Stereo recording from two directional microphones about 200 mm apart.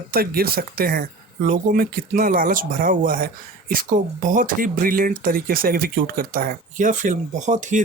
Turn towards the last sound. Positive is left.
turn(degrees=-35)  # may be behind; listen again after turning